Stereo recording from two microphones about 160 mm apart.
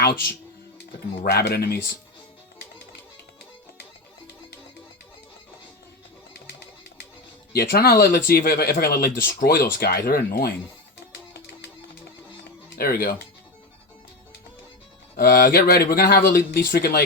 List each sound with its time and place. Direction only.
1.2 s speech: 75° left (ahead or behind)
7.5 s speech: 75° left (ahead or behind)
12.7 s speech: 70° left (ahead or behind)
15.1 s speech: 75° left (ahead or behind)